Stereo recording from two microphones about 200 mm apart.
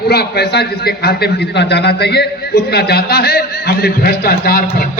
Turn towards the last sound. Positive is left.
turn(degrees=50)  # may be behind; listen again after turning